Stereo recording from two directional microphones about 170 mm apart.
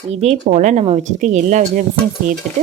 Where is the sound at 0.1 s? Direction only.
40° right (ahead or behind).